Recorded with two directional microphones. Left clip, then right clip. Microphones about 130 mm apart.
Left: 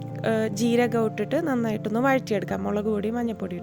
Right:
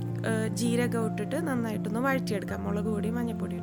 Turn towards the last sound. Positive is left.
turn(degrees=40)  # may be behind; listen again after turning